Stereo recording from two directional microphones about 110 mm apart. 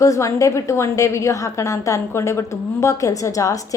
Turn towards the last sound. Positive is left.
turn(degrees=30)  # may be behind; listen again after turning